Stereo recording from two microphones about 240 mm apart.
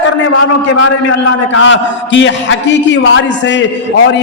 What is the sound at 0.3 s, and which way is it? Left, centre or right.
A man's voice, left.